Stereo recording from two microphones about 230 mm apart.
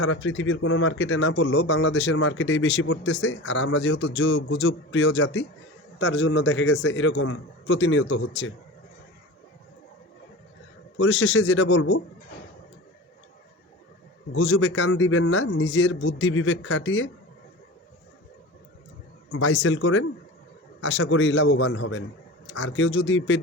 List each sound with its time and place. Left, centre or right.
0.0 s speech: left
10.9 s speech: left
14.3 s speech: left
19.3 s speech: left